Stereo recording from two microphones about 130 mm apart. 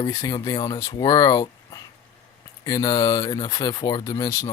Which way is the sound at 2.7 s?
30° left (ahead or behind).